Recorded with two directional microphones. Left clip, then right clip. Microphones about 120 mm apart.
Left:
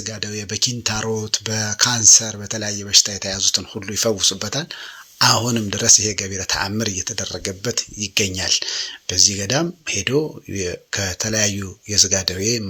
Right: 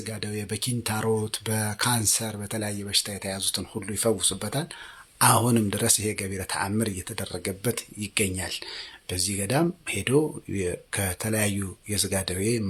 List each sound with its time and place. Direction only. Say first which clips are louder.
0.0 s speech: left 6 dB; centre (ahead or behind)
8.3 s speech: left 12 dB; 15° left (ahead or behind)
9.0 s speech: left 12 dB; 5° left (ahead or behind)